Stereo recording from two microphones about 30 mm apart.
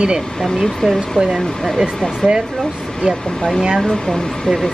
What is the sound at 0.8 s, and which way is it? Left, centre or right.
Speech, centre.